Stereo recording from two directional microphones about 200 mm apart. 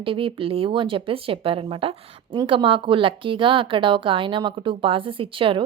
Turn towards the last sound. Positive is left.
turn(degrees=-25)  # may be behind; listen again after turning